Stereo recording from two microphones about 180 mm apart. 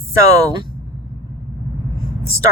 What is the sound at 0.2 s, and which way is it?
Speech, 20° right (ahead or behind).